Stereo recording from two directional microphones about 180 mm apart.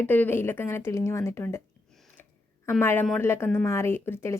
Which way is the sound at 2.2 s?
10° left (ahead or behind).